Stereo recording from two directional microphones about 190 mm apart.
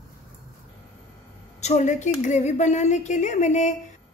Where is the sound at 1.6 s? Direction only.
40° left (ahead or behind).